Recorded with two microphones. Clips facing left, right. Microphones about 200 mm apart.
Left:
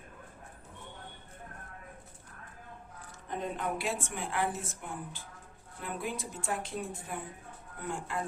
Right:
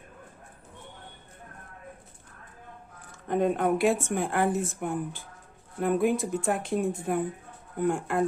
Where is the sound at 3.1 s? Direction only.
55° right (ahead or behind).